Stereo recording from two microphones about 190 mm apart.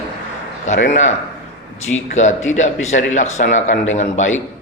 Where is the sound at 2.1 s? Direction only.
40° left (ahead or behind).